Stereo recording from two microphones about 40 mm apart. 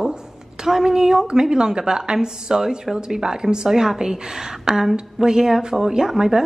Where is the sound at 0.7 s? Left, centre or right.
Centre.